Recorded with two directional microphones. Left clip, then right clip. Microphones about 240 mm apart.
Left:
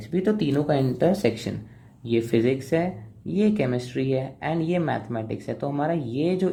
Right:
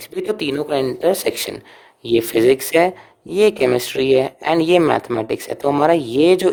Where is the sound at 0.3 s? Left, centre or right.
Right.